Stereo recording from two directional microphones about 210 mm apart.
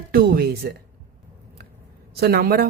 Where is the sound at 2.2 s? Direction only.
50° right (ahead or behind).